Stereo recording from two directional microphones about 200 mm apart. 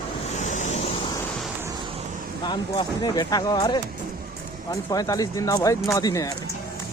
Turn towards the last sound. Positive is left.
turn(degrees=20)  # may be behind; listen again after turning